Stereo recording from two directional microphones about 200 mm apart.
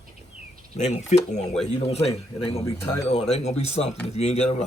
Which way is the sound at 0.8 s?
35° left (ahead or behind).